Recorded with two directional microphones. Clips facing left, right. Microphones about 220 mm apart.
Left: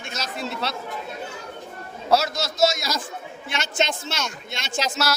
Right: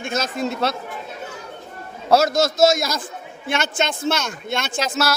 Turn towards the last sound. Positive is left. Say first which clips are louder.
# right 3 dB
turn(degrees=-55)  # may be behind; listen again after turning